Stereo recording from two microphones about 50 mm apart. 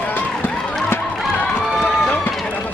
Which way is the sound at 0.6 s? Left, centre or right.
Centre.